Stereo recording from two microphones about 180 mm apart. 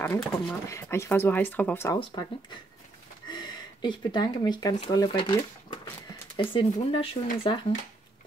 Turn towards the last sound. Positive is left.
turn(degrees=30)  # may be behind; listen again after turning